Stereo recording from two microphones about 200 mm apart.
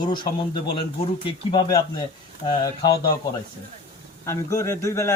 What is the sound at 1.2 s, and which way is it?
Speech, 25° left (ahead or behind).